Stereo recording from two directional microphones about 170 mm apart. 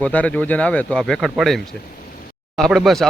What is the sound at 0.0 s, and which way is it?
Speech, 10° left (ahead or behind).